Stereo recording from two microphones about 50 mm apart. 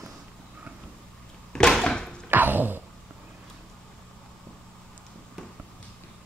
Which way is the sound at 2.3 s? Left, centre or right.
Right.